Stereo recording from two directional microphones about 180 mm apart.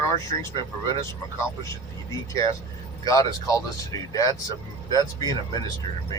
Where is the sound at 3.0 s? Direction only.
20° left (ahead or behind).